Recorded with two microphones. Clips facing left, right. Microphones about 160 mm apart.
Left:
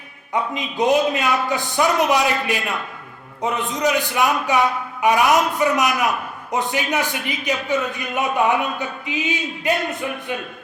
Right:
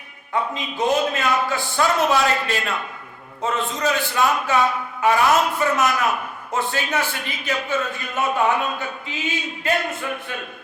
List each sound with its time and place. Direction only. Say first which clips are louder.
0.3 s a man's voice: left 2 dB; 20° left (ahead or behind)